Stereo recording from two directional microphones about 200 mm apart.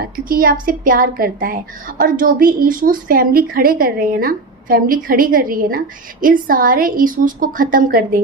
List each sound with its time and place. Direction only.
0.1 s a woman's voice: 45° right (ahead or behind)